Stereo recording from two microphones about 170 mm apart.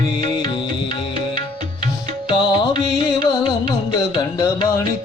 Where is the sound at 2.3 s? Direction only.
25° left (ahead or behind).